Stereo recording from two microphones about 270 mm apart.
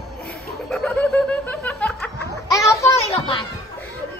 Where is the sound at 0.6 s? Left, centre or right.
Centre.